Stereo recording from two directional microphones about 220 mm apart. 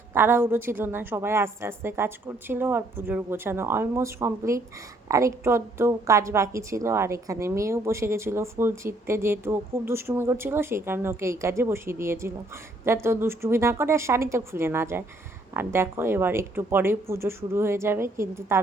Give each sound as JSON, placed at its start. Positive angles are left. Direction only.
{"t": 0.1, "sound": "a woman's voice", "side_deg": -10}